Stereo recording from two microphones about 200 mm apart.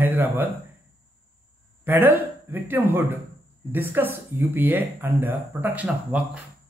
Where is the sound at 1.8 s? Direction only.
10° right (ahead or behind).